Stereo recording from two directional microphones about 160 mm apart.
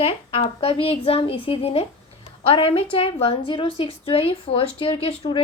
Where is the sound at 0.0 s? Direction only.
35° left (ahead or behind).